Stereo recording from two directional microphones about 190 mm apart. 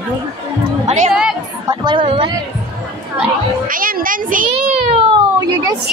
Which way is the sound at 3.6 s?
45° right (ahead or behind).